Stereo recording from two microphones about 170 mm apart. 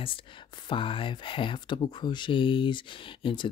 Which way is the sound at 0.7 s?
30° left (ahead or behind).